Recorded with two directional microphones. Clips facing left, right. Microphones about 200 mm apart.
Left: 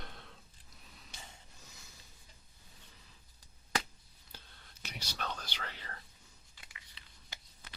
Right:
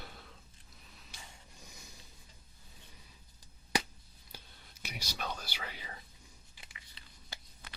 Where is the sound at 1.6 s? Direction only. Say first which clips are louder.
Right 3 dB; 15° right (ahead or behind).